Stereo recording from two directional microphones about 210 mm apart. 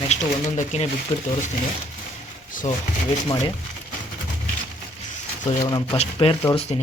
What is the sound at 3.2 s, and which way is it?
Speech, 20° left (ahead or behind).